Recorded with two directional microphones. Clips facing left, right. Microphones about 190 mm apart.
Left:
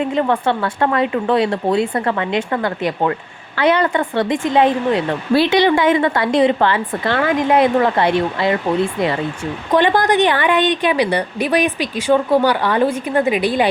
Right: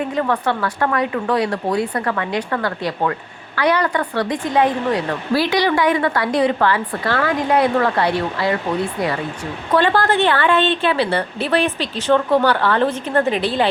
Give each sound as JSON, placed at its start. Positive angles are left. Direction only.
{"t": 0.1, "sound": "speech", "side_deg": 25}
{"t": 9.7, "sound": "a woman's voice", "side_deg": 15}